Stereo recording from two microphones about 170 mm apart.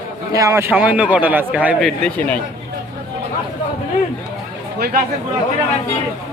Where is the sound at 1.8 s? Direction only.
5° left (ahead or behind).